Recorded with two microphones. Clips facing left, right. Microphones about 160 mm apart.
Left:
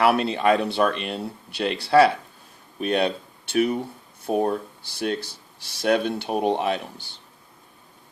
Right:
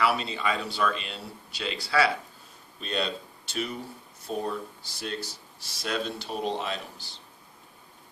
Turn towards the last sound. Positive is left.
turn(degrees=60)  # may be behind; listen again after turning